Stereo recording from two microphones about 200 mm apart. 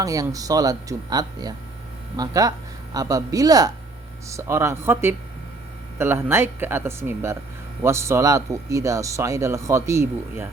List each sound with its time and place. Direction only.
0.0 s speech: 15° right (ahead or behind)